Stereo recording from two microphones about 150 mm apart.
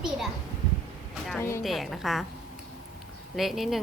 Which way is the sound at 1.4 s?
20° left (ahead or behind).